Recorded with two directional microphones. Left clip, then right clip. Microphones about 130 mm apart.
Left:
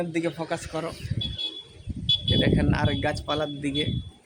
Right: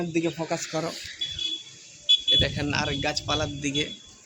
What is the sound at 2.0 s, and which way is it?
Speech, 40° left (ahead or behind).